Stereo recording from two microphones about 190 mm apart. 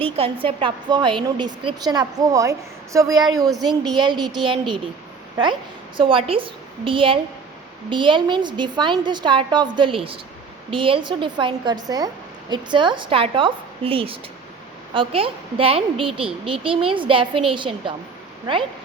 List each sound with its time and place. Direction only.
0.0 s a woman's voice: 30° right (ahead or behind)
6.0 s a woman's voice: 30° right (ahead or behind)